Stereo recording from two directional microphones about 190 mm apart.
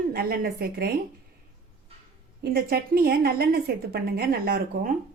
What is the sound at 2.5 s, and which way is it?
A woman's voice, 50° right (ahead or behind).